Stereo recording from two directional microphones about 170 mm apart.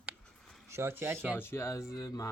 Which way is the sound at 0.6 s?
15° right (ahead or behind).